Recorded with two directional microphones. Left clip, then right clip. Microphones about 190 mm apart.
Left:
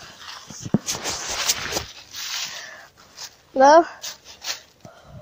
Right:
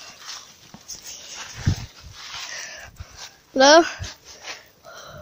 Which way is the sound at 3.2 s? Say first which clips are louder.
Left 2 dB; 50° left (ahead or behind).